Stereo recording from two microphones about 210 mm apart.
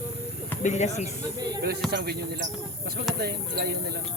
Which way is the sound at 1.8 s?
55° right (ahead or behind).